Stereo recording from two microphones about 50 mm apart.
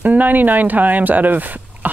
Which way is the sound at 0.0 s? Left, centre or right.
Right.